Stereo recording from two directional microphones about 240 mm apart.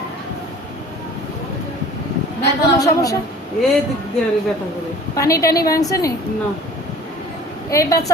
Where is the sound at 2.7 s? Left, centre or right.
Centre.